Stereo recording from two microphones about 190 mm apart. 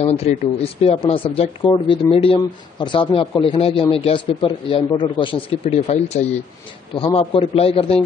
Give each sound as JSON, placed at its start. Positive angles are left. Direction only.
{"t": 0.0, "sound": "speech", "side_deg": 35}